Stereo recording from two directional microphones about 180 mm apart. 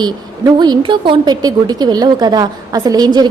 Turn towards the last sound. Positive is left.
turn(degrees=-20)  # may be behind; listen again after turning